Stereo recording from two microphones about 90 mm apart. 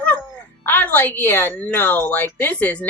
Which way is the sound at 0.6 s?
20° left (ahead or behind).